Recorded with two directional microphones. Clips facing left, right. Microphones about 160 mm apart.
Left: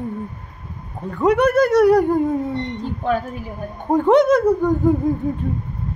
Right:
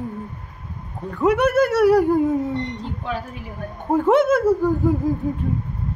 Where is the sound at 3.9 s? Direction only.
5° right (ahead or behind).